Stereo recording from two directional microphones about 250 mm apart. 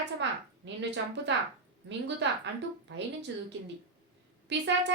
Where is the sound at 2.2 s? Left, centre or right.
Right.